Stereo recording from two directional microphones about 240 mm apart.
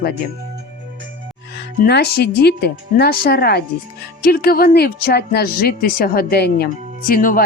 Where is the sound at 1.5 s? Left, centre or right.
Left.